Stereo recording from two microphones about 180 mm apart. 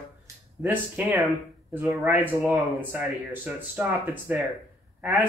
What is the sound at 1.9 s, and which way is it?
Speech, 5° right (ahead or behind).